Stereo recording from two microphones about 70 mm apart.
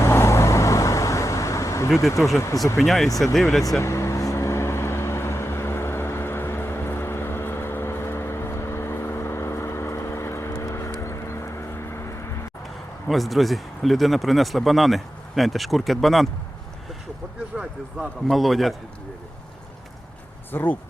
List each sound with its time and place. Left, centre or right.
0.0 s vehicle: left
2.0 s speech: left
2.7 s speech: centre
3.8 s vehicle: left
11.0 s a sound: left
13.1 s speech: centre
17.9 s speech: centre
20.5 s speech: left